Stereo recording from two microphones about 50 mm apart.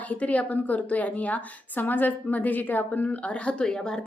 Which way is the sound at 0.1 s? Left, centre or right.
Left.